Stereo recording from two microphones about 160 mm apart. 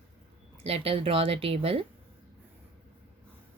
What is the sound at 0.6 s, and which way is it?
A woman's voice, 40° right (ahead or behind).